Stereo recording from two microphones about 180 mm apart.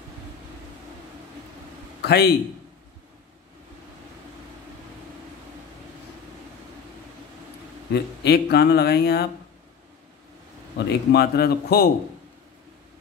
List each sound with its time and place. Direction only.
2.0 s a sound: 65° left (ahead or behind)
7.9 s speech: 65° left (ahead or behind)
10.9 s speech: 65° left (ahead or behind)